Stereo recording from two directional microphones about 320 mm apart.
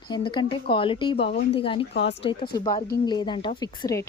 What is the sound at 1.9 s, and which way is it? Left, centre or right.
Speech, left.